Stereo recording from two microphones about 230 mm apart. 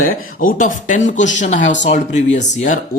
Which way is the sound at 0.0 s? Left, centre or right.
Left.